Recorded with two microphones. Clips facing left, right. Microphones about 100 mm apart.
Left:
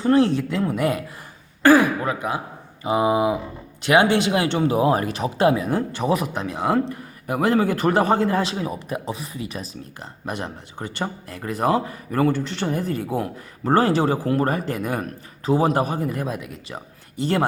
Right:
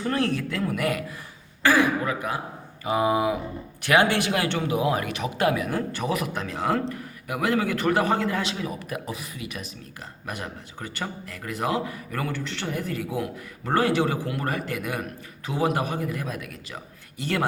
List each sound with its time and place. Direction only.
0.0 s speech: 25° left (ahead or behind)
1.6 s a man's voice: 35° left (ahead or behind)
2.8 s a man's voice: 20° left (ahead or behind)